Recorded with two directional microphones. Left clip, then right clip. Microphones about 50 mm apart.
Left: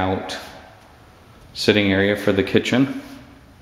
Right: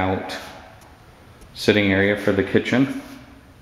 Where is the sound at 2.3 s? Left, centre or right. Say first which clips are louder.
Left 1 dB; left.